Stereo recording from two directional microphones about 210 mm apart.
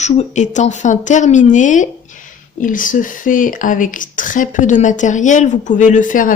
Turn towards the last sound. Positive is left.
turn(degrees=40)  # may be behind; listen again after turning